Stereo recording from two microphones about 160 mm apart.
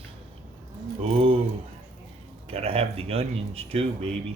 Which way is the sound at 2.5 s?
35° right (ahead or behind).